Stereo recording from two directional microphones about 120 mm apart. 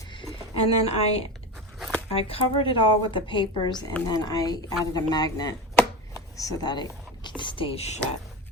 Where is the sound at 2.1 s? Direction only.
55° left (ahead or behind); by 5.5 s 35° left (ahead or behind).